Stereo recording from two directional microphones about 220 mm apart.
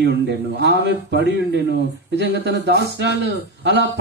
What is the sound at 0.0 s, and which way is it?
A man's voice, 50° right (ahead or behind).